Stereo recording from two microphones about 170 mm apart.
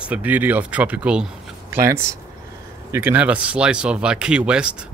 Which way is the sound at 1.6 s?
15° right (ahead or behind).